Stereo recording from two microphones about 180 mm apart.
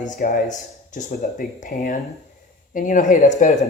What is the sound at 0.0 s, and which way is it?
Speech, 45° left (ahead or behind).